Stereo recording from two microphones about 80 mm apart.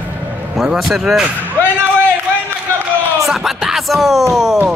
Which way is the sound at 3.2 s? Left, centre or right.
Centre.